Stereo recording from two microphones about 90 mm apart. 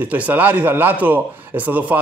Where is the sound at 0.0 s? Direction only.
20° right (ahead or behind).